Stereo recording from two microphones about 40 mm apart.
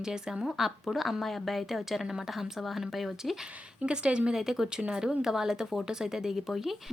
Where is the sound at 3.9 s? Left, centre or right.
Right.